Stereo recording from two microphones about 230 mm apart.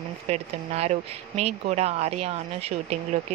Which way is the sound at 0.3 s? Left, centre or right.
Right.